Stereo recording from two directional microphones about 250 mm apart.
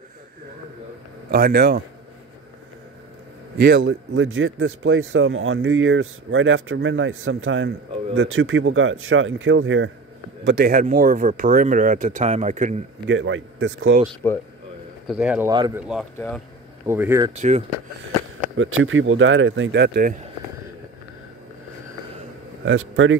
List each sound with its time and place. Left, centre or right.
1.3 s speech: right
3.5 s speech: right
10.4 s speech: right
13.0 s speech: right
14.2 s speech: centre
15.0 s speech: centre
15.5 s speech: centre
16.2 s speech: centre
16.8 s speech: centre
17.3 s speech: right
18.6 s speech: right
22.7 s speech: right